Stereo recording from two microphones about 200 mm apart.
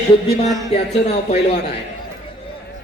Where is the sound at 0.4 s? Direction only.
15° right (ahead or behind).